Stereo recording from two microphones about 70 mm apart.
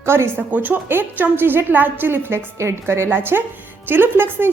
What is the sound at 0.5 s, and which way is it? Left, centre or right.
A woman's voice, right.